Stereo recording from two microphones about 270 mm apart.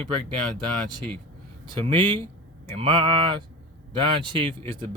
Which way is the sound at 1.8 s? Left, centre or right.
Centre.